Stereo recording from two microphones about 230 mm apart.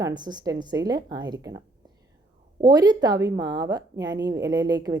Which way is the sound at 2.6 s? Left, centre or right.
Centre.